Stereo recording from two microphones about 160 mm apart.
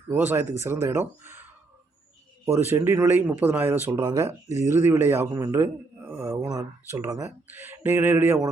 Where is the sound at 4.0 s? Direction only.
25° right (ahead or behind).